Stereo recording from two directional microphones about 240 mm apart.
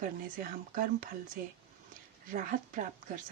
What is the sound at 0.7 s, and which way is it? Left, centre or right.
Speech, right.